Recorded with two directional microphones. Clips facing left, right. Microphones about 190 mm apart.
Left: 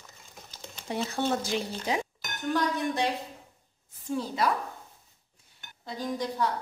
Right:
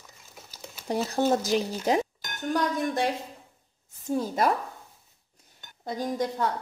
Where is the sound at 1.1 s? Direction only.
40° right (ahead or behind).